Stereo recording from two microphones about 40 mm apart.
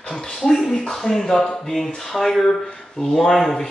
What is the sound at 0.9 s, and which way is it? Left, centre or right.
Speech, centre.